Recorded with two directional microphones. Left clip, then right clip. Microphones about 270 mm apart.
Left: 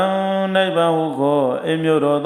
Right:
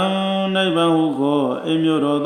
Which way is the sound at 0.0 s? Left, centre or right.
Left.